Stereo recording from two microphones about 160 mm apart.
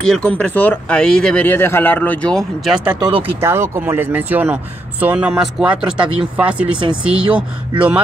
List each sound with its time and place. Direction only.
0.0 s speech: 5° left (ahead or behind)
3.1 s speech: 35° right (ahead or behind)
3.3 s speech: 15° right (ahead or behind)